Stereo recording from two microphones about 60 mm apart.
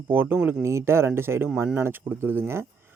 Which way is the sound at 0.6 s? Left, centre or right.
Right.